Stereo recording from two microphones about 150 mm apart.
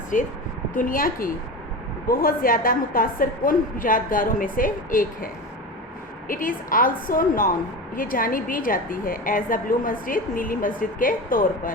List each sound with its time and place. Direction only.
0.1 s a woman's voice: 60° left (ahead or behind)